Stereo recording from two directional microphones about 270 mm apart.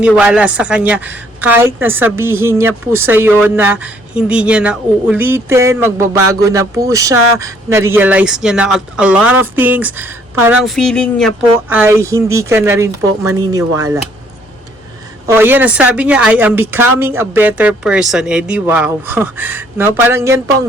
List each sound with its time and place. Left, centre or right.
0.0 s a woman's voice: centre
15.3 s speech: centre